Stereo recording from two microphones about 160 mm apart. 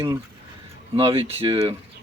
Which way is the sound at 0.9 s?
35° right (ahead or behind).